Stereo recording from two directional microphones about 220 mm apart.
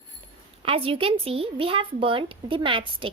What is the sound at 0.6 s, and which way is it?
Speech, 25° right (ahead or behind).